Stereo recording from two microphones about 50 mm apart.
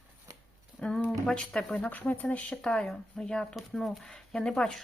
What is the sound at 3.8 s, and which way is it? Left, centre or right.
Speech, centre.